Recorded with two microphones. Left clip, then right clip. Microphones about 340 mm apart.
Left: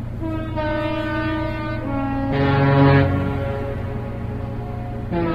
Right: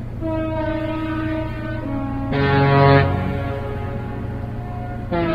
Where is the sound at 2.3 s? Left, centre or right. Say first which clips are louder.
Right 3 dB; centre.